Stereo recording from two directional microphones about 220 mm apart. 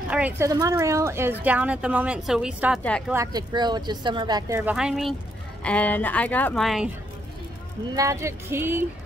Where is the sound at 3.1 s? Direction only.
15° right (ahead or behind); by 6.8 s centre (ahead or behind).